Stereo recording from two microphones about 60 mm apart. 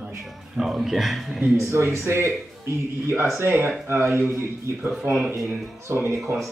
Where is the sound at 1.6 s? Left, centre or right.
Right.